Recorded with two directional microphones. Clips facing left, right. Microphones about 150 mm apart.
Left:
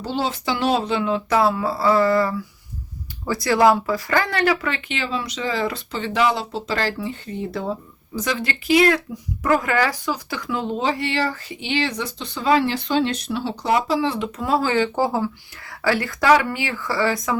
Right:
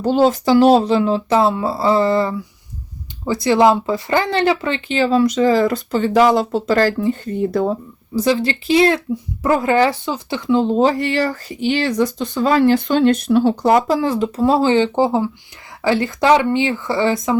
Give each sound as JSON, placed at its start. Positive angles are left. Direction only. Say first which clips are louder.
{"t": 0.0, "sound": "speech", "louder": "right 10 dB", "side_deg": -50}
{"t": 8.1, "sound": "speech", "louder": "right 8 dB", "side_deg": -30}